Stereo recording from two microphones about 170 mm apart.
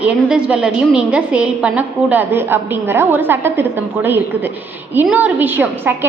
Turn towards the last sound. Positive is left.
turn(degrees=-10)  # may be behind; listen again after turning